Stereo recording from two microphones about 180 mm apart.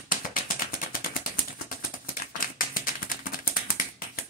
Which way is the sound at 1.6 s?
50° left (ahead or behind).